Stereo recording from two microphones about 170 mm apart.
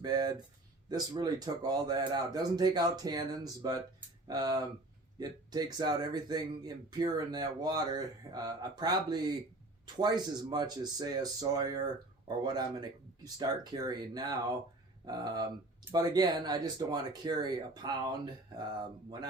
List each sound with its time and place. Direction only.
0.0 s speech: 25° right (ahead or behind)